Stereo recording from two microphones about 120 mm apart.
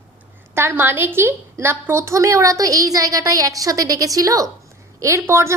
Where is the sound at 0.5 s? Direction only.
20° right (ahead or behind).